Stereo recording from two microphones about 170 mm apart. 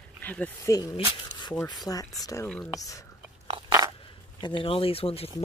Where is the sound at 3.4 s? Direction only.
20° right (ahead or behind).